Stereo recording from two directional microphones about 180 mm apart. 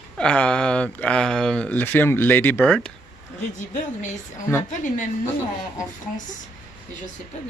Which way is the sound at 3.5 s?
45° left (ahead or behind).